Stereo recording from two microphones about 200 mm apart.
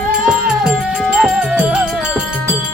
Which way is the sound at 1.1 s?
5° right (ahead or behind).